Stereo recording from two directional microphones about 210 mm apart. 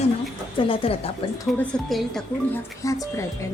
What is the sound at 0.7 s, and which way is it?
Speech, 25° left (ahead or behind).